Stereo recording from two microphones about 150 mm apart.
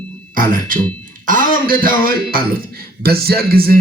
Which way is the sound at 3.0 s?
90° right.